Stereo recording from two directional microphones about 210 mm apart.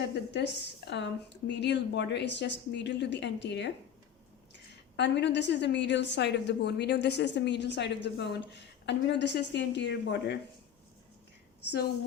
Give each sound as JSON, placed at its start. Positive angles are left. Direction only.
{"t": 0.3, "sound": "a woman's voice", "side_deg": 55}